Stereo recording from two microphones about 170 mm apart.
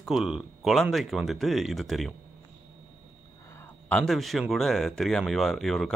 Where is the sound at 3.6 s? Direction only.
5° left (ahead or behind).